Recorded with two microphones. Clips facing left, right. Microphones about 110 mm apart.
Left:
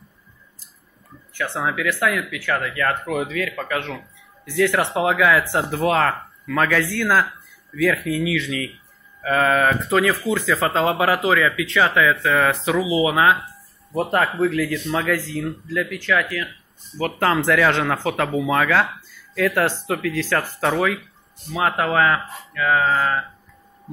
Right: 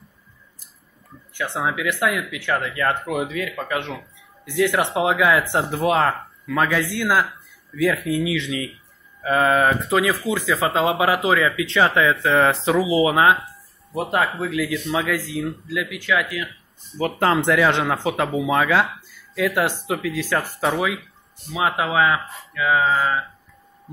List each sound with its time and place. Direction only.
1.3 s speech: 15° right (ahead or behind)
13.9 s speech: 10° right (ahead or behind)